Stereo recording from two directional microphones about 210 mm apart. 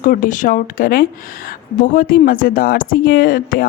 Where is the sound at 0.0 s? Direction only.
40° left (ahead or behind).